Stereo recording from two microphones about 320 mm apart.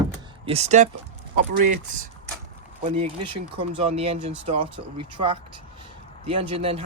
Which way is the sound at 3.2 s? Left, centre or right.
Centre.